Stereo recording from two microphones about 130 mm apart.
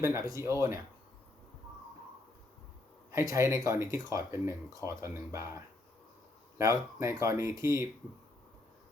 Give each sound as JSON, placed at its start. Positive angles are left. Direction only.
{"t": 0.0, "sound": "speech", "side_deg": -25}
{"t": 3.1, "sound": "speech", "side_deg": -25}